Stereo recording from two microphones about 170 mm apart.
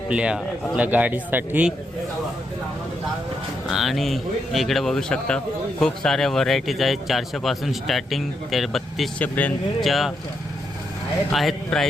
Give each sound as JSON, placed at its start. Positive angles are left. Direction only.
{"t": 0.1, "sound": "speech", "side_deg": -5}
{"t": 3.7, "sound": "a man's voice", "side_deg": 0}
{"t": 11.3, "sound": "a man's voice", "side_deg": 0}